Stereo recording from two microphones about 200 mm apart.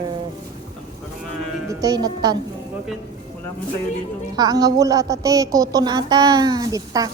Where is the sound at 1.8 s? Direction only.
20° right (ahead or behind).